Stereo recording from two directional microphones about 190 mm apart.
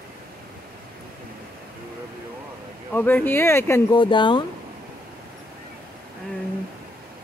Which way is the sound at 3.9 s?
25° left (ahead or behind).